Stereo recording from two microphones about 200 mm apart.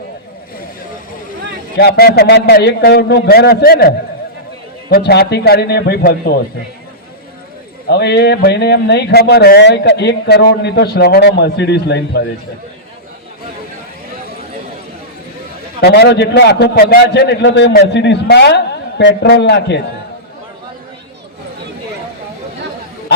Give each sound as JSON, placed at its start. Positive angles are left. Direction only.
{"t": 1.8, "sound": "a man's voice", "side_deg": 50}
{"t": 7.9, "sound": "speech", "side_deg": 55}
{"t": 15.8, "sound": "speech", "side_deg": 55}